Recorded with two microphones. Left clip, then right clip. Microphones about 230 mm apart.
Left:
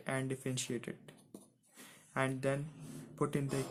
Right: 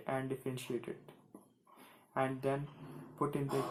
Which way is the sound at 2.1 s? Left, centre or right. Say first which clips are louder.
Even; left.